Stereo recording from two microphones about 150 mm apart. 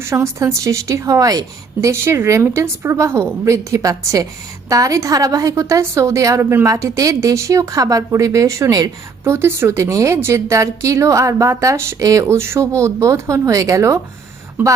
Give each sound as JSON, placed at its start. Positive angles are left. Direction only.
{"t": 0.0, "sound": "a woman's voice", "side_deg": -20}